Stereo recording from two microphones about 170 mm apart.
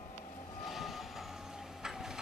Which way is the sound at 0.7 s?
Centre (ahead or behind).